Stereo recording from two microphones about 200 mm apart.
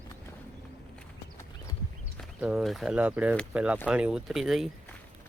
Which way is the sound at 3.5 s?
5° right (ahead or behind).